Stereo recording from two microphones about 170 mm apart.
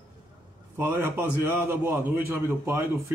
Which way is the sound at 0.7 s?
15° right (ahead or behind).